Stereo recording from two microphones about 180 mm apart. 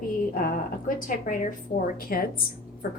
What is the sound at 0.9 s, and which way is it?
A woman's voice, 45° left (ahead or behind).